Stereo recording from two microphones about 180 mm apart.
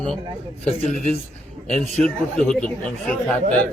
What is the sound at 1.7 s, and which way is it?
A man's voice, 5° left (ahead or behind).